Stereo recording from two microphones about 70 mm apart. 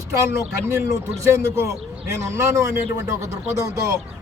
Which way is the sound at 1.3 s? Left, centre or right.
Right.